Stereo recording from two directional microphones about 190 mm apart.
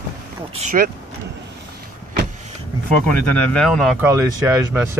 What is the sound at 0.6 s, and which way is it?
Speech, 50° right (ahead or behind).